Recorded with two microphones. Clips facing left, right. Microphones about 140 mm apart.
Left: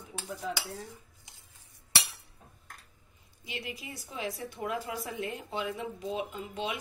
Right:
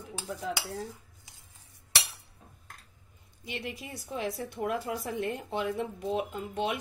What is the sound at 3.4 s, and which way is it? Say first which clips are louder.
A woman's voice: right 2 dB; 55° right (ahead or behind).